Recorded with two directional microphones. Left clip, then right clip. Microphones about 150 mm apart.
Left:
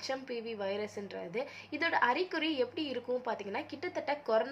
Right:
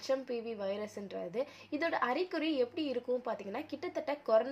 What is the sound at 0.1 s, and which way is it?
A woman's voice, 45° right (ahead or behind).